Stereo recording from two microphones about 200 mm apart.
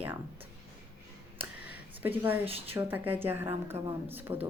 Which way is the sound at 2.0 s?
10° right (ahead or behind).